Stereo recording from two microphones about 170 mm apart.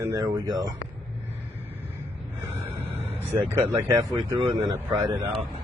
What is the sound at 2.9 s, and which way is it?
Vehicle, 35° right (ahead or behind).